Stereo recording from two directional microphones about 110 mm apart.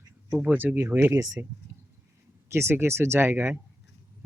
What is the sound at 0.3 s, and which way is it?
Speech, 15° right (ahead or behind).